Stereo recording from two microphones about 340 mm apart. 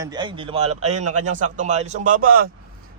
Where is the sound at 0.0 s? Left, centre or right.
Centre.